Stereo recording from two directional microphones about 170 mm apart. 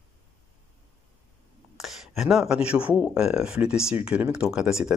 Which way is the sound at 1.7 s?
Centre (ahead or behind).